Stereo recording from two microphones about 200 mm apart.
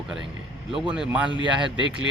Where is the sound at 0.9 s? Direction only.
5° right (ahead or behind).